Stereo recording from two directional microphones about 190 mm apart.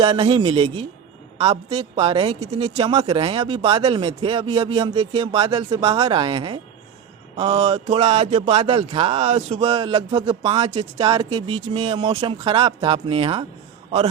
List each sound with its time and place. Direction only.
0.0 s a woman's voice: 30° right (ahead or behind)